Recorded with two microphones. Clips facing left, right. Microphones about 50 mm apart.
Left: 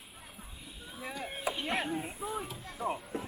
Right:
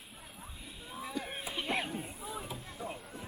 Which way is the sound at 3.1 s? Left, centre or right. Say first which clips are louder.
Left 7 dB; left.